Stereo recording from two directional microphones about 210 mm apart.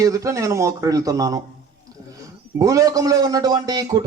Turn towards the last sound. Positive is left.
turn(degrees=-20)  # may be behind; listen again after turning